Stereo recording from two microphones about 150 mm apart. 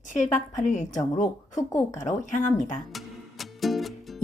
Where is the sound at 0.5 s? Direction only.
55° left (ahead or behind).